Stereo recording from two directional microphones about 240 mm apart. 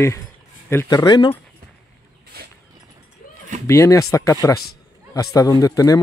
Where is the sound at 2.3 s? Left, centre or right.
Right.